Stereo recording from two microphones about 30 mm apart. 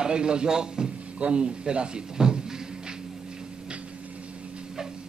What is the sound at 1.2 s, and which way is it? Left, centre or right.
Speech, right.